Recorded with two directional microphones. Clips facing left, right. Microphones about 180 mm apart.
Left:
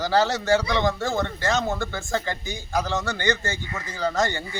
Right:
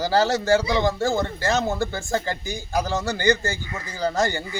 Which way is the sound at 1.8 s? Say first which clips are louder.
Right 2 dB; 35° right (ahead or behind).